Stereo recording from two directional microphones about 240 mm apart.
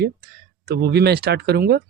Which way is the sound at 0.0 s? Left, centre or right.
Right.